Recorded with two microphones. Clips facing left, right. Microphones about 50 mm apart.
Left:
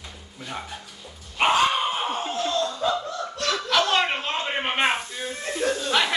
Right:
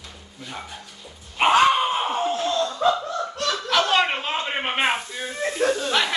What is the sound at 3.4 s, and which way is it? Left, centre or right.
Snicker, left.